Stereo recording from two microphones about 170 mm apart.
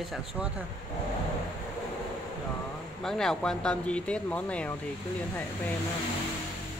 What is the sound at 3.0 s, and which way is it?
Speech, 5° left (ahead or behind).